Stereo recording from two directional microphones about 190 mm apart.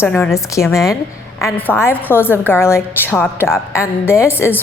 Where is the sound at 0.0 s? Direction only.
10° left (ahead or behind).